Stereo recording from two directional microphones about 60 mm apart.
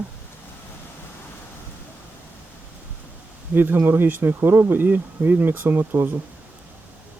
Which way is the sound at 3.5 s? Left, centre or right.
Right.